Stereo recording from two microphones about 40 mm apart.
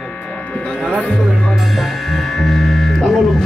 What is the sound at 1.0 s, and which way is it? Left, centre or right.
Speech, left.